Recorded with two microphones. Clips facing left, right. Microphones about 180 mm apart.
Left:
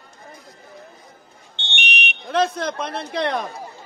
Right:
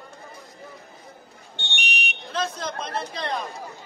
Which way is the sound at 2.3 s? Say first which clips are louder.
Left 8 dB; 60° left (ahead or behind).